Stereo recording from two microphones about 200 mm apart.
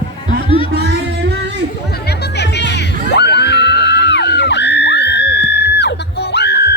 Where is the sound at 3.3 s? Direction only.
60° left (ahead or behind).